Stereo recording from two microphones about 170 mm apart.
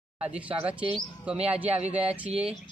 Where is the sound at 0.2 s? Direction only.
10° right (ahead or behind).